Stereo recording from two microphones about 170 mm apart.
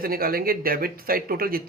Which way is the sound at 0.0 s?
60° right (ahead or behind).